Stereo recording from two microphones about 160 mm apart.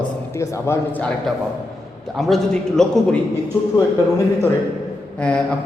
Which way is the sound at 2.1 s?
Centre (ahead or behind).